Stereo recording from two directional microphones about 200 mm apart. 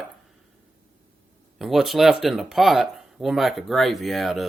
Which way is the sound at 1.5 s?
Centre (ahead or behind).